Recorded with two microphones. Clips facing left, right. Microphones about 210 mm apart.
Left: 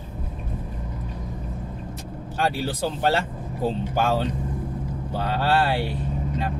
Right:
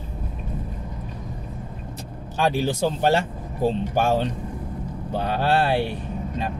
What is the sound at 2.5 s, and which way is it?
Speech, 20° right (ahead or behind).